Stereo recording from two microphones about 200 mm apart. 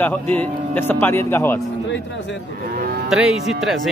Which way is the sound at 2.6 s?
45° right (ahead or behind).